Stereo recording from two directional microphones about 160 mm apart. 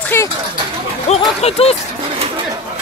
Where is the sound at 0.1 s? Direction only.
15° left (ahead or behind).